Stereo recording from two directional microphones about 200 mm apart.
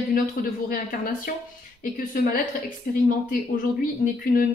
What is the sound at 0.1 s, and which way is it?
A woman's voice, 45° left (ahead or behind).